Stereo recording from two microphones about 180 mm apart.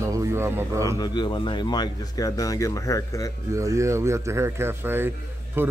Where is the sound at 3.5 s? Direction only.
15° right (ahead or behind).